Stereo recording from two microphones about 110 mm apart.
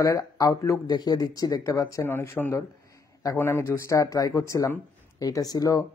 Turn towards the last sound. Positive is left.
turn(degrees=35)  # may be behind; listen again after turning